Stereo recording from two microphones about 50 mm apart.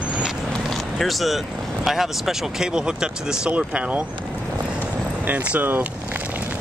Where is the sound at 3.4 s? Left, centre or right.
Right.